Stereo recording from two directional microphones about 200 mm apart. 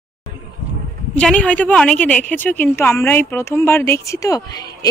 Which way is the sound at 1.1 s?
5° left (ahead or behind).